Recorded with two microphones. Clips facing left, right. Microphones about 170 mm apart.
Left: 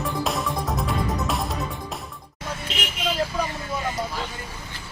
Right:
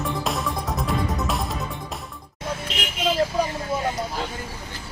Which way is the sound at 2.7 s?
Centre (ahead or behind).